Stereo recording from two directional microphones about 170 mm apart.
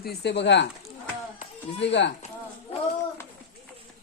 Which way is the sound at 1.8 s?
90° left.